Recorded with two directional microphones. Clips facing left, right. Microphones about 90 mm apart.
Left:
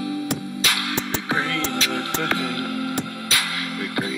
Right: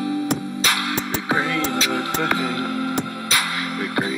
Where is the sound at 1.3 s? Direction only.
30° right (ahead or behind).